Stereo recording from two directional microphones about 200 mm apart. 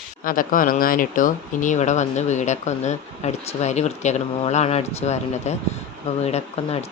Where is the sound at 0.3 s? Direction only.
45° left (ahead or behind).